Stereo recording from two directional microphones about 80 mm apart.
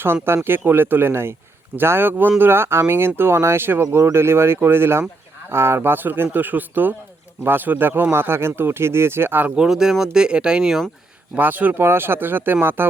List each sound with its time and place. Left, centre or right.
0.0 s speech: right
9.6 s speech: centre
11.3 s speech: right